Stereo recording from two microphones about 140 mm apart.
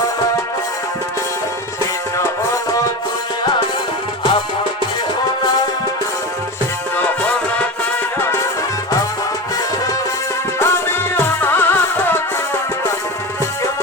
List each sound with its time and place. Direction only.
6.9 s music: 15° left (ahead or behind)
10.6 s music: 15° left (ahead or behind)